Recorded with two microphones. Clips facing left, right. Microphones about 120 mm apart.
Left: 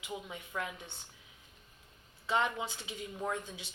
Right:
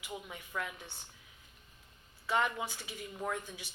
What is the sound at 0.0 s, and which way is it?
Speech, 20° left (ahead or behind).